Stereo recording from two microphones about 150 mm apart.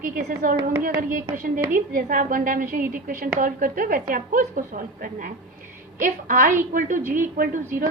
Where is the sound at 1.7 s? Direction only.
70° right (ahead or behind).